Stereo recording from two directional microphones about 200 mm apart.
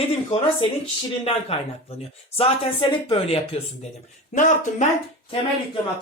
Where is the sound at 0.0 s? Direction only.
30° left (ahead or behind).